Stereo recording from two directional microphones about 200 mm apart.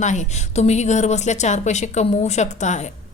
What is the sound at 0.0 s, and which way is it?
A woman's voice, 35° left (ahead or behind).